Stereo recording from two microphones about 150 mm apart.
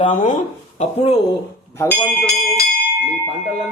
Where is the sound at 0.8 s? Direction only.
45° left (ahead or behind).